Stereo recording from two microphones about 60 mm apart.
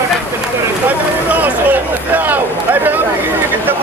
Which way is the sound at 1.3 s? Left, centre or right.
Right.